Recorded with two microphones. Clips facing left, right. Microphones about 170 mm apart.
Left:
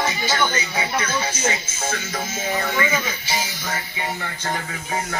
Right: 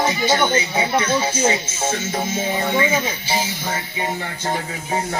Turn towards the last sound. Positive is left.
turn(degrees=-30)  # may be behind; listen again after turning